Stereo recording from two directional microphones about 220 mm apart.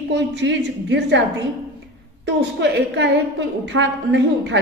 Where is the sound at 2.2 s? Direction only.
50° right (ahead or behind).